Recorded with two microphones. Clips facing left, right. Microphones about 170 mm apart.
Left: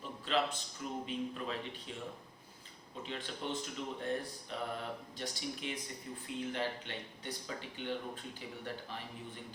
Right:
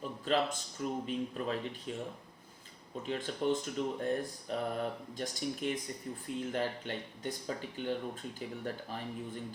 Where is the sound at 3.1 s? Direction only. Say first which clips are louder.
Right 8 dB; 45° right (ahead or behind).